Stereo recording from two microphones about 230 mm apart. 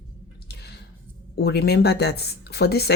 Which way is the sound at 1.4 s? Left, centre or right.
Left.